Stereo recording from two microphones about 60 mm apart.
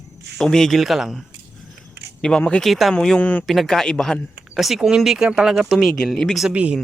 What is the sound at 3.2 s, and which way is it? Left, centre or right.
Speech, left.